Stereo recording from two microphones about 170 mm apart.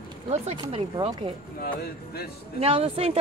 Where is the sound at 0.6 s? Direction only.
25° right (ahead or behind).